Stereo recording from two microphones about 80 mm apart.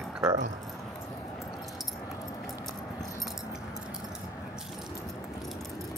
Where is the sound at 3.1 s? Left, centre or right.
Centre.